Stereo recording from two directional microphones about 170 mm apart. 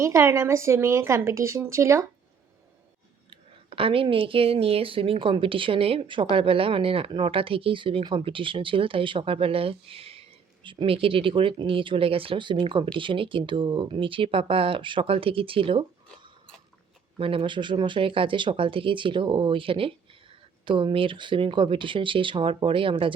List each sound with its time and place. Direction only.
0.0 s a woman's voice: 15° right (ahead or behind)
3.2 s speech: 35° right (ahead or behind)